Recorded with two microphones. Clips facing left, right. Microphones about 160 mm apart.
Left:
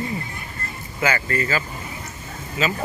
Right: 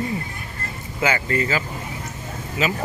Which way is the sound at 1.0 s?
20° right (ahead or behind).